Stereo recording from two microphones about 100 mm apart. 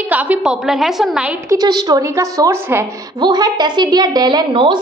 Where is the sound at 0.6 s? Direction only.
5° right (ahead or behind).